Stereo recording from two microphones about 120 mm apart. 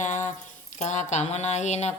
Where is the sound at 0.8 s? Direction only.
75° left (ahead or behind).